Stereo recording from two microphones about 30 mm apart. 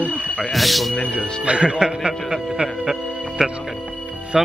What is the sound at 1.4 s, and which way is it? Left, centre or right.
Speech, right.